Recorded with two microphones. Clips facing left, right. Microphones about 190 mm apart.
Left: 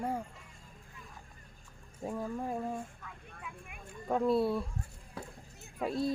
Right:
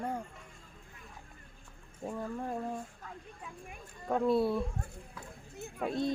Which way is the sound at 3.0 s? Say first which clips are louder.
Right 1 dB; 35° right (ahead or behind).